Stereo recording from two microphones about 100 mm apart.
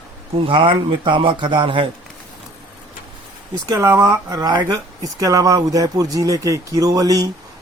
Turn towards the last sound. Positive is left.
turn(degrees=-40)  # may be behind; listen again after turning